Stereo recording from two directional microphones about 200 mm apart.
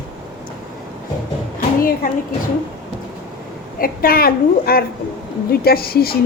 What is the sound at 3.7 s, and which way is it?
A woman's voice, 45° left (ahead or behind).